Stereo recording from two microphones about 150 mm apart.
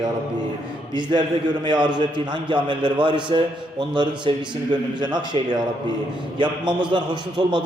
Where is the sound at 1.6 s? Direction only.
30° right (ahead or behind).